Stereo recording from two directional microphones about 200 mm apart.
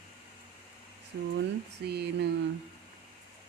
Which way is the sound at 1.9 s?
55° right (ahead or behind).